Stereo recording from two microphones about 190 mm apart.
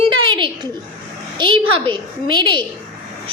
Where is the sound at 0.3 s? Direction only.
25° right (ahead or behind).